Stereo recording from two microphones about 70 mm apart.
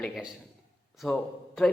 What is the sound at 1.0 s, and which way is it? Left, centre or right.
Speech, centre.